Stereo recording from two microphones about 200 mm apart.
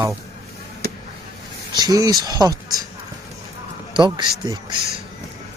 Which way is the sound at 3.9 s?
25° right (ahead or behind).